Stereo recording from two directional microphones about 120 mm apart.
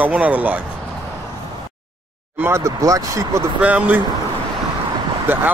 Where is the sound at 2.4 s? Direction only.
25° right (ahead or behind).